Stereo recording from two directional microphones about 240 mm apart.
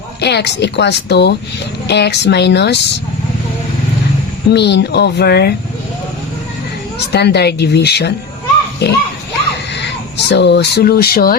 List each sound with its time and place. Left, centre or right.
0.2 s speech: left
4.5 s speech: left
7.1 s speech: left